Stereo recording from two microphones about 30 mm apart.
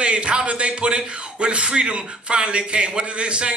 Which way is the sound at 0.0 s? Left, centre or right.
Right.